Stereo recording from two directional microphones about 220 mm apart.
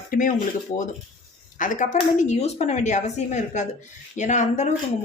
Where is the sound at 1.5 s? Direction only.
35° left (ahead or behind).